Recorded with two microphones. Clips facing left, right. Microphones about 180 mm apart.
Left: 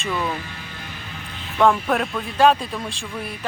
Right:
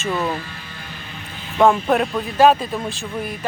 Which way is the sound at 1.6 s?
25° right (ahead or behind).